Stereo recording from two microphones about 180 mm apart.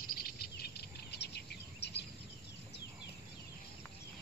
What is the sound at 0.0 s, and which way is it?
Cricket, 55° left (ahead or behind).